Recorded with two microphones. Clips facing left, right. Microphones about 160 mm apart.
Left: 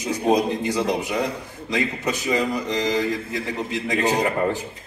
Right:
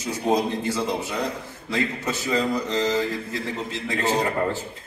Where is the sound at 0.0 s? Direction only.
20° left (ahead or behind).